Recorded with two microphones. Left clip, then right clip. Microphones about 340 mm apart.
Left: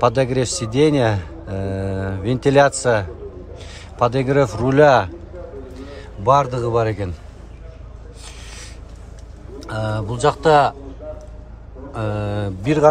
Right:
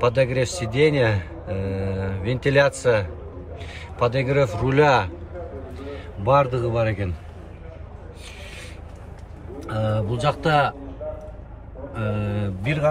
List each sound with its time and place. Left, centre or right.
0.0 s a man's voice: centre
6.2 s speech: centre
9.7 s speech: centre
12.0 s mantra: centre